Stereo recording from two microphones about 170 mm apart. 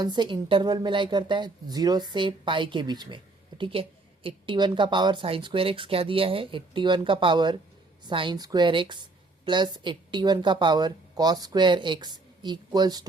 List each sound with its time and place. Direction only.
0.0 s speech: 25° right (ahead or behind)